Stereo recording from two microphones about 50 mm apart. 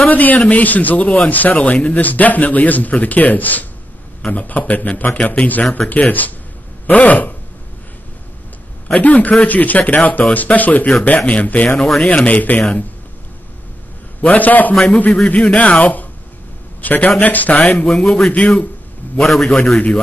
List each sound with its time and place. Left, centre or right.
0.1 s a man's voice: left
8.8 s a man's voice: left
11.8 s a man's voice: centre
12.3 s a man's voice: left
14.2 s a man's voice: left
17.8 s a man's voice: centre